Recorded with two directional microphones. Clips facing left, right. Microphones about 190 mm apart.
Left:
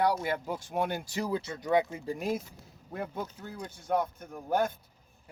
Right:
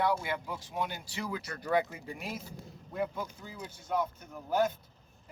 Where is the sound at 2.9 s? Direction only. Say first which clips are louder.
Right 1 dB; 55° left (ahead or behind).